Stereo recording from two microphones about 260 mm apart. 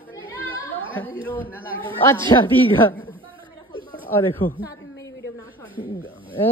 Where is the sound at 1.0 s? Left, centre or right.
Centre.